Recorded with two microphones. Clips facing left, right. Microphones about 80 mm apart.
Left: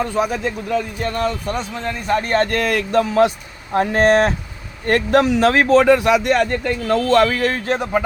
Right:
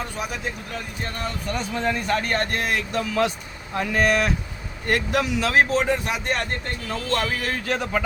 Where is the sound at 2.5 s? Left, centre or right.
Left.